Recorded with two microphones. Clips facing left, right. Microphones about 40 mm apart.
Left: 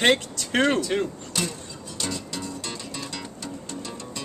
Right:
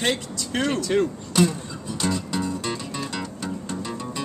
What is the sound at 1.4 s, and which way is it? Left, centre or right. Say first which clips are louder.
Music: right 9 dB; centre.